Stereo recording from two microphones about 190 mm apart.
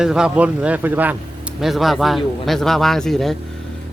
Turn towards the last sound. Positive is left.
turn(degrees=0)  # may be behind; listen again after turning